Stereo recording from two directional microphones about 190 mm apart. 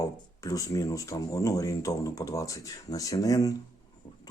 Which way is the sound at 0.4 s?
20° left (ahead or behind).